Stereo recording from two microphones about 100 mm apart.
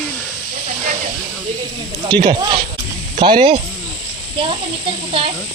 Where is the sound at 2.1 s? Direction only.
50° right (ahead or behind).